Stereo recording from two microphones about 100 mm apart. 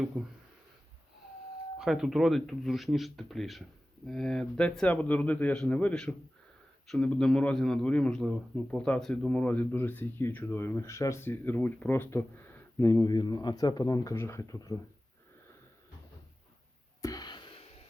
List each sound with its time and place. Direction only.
0.1 s speech: 10° right (ahead or behind)
1.8 s speech: 5° right (ahead or behind); by 13.1 s 30° left (ahead or behind)
13.1 s speech: 45° left (ahead or behind)
17.0 s a sound: 40° left (ahead or behind)